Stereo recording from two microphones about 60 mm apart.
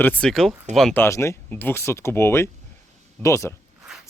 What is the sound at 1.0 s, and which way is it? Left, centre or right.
Speech, left.